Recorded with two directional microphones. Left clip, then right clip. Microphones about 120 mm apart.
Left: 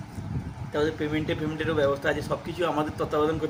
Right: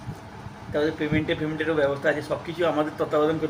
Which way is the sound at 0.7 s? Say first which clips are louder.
Right 2 dB; 5° left (ahead or behind).